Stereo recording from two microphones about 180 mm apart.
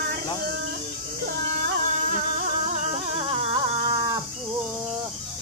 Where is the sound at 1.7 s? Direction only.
45° right (ahead or behind).